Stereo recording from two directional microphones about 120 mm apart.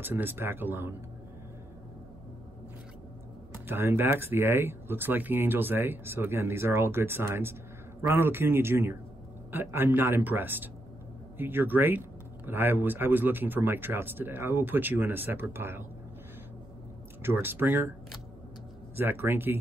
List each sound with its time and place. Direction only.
0.0 s speech: 15° right (ahead or behind)
3.6 s speech: 20° right (ahead or behind)
17.2 s speech: 20° right (ahead or behind)
18.9 s speech: 15° right (ahead or behind)